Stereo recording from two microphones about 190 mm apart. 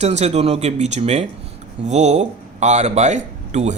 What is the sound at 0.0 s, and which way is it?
Speech, 35° right (ahead or behind).